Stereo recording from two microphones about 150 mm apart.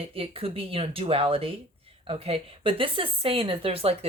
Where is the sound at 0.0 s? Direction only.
40° right (ahead or behind).